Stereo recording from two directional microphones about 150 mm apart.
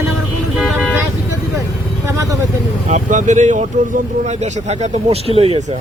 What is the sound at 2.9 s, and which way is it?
Speech, 55° right (ahead or behind).